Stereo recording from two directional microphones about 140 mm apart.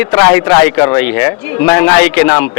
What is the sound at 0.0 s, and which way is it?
A man's voice, 20° left (ahead or behind).